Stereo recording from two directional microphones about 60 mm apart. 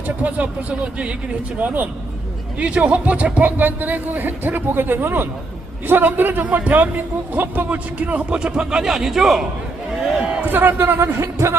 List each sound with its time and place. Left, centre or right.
0.2 s a man's voice: right
1.5 s a man's voice: right
2.6 s a man's voice: centre
10.4 s a man's voice: right
11.0 s speech: right